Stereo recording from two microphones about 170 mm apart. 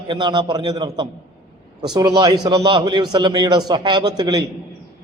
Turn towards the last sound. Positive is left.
turn(degrees=-25)  # may be behind; listen again after turning